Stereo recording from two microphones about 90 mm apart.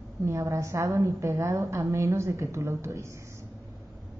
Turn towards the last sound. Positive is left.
turn(degrees=-30)  # may be behind; listen again after turning